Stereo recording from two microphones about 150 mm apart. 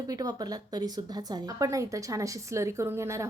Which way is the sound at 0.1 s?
25° right (ahead or behind).